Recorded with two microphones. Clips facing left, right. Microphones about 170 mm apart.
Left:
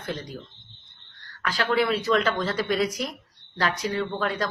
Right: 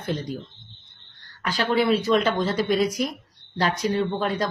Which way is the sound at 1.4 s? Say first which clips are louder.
Right 2 dB; 20° right (ahead or behind).